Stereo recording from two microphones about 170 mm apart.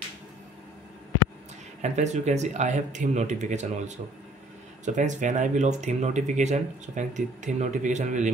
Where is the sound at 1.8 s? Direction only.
40° right (ahead or behind).